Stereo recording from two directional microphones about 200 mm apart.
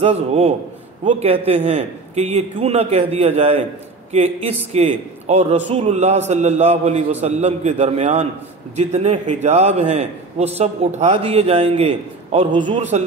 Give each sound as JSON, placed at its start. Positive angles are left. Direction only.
{"t": 0.0, "sound": "a man's voice", "side_deg": -30}